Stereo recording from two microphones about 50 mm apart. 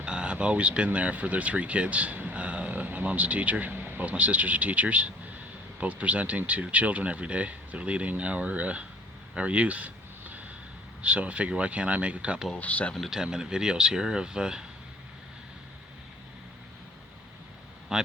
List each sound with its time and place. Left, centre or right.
0.0 s a sound: centre
0.9 s speech: right
4.0 s speech: right
9.3 s a sound: right
11.0 s speech: right
12.5 s speech: left
13.1 s speech: centre
17.9 s speech: centre